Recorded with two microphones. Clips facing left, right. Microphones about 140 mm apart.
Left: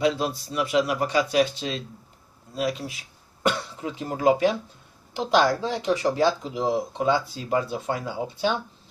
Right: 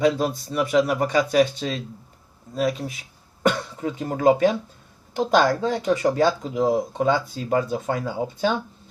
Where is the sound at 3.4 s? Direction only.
45° right (ahead or behind).